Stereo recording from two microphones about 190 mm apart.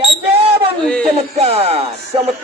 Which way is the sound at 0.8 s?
5° left (ahead or behind).